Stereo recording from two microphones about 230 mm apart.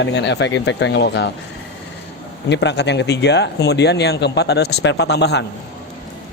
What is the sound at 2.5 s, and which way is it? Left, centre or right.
Speech, left.